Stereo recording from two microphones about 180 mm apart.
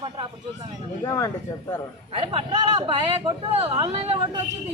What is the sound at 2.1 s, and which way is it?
A man's voice, 30° right (ahead or behind).